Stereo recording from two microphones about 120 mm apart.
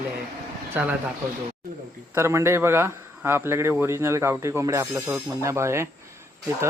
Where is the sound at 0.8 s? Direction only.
15° right (ahead or behind).